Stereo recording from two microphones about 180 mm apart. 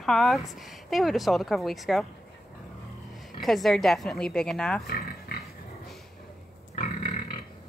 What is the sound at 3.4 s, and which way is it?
A woman's voice, centre (ahead or behind).